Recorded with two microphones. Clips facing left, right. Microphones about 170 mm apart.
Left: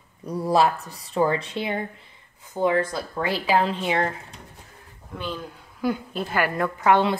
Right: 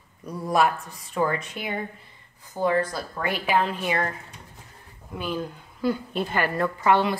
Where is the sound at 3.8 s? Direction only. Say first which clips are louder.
Left 2 dB; 20° left (ahead or behind).